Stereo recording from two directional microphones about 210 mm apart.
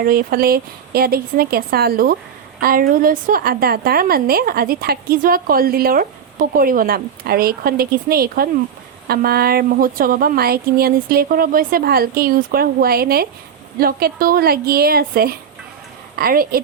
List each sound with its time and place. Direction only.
0.0 s a woman's voice: 45° right (ahead or behind)